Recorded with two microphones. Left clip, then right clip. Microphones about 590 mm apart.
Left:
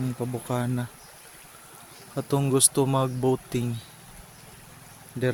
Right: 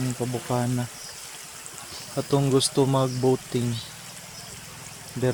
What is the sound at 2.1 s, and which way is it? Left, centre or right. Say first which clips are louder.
Speech: right 2 dB; left.